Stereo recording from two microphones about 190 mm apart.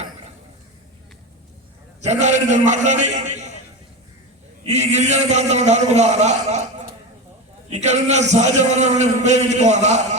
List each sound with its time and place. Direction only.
2.0 s a man's voice: 40° right (ahead or behind)
4.6 s a man's voice: 35° right (ahead or behind)
7.7 s a man's voice: 35° right (ahead or behind)